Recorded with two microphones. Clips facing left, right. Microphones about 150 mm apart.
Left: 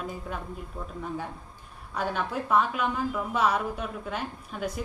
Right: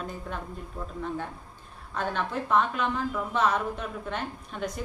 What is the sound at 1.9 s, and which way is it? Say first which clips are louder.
A woman's voice: even; 10° left (ahead or behind).